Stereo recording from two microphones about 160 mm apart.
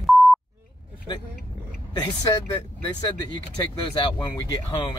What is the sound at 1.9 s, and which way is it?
Speech, 25° left (ahead or behind).